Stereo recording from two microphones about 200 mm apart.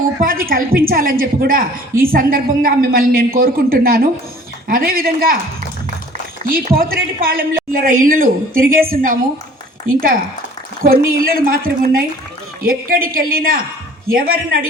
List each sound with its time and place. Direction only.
0.2 s a woman's voice: 45° right (ahead or behind)
6.5 s a woman's voice: 45° right (ahead or behind)
10.8 s a woman's voice: 45° right (ahead or behind)